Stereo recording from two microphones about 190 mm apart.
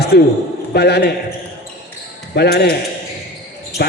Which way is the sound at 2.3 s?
60° left (ahead or behind).